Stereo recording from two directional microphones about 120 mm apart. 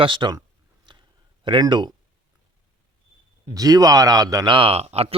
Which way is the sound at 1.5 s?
40° right (ahead or behind).